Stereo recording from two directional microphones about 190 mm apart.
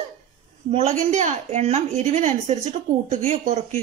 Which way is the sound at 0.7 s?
35° right (ahead or behind).